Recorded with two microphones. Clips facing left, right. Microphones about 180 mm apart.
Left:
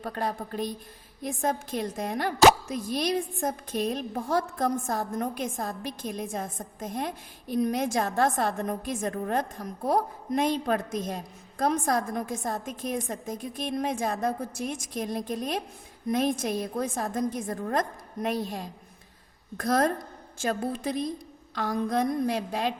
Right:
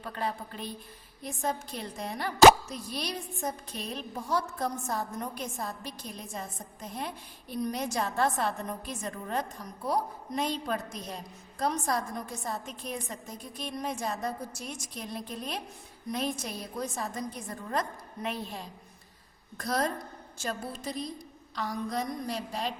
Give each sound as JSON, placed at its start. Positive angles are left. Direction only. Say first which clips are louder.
{"t": 0.0, "sound": "a woman's voice", "louder": "left 3 dB", "side_deg": 45}